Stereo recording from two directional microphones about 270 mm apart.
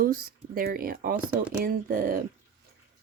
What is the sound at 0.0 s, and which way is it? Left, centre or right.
Speech, right.